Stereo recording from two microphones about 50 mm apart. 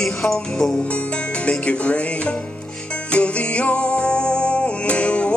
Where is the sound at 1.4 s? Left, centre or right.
Left.